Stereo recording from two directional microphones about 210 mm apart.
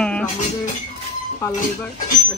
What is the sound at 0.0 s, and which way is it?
Music, 5° left (ahead or behind).